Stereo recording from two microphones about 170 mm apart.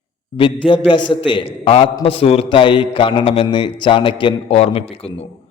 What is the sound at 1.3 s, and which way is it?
Mantra, 30° left (ahead or behind).